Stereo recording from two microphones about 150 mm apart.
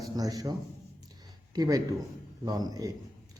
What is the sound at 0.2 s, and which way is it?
Speech, 25° right (ahead or behind).